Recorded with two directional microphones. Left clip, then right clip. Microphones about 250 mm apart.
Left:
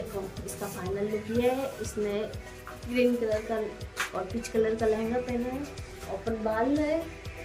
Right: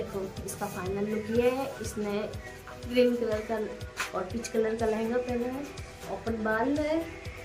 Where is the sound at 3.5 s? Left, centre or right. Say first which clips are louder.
Left 1 dB; centre.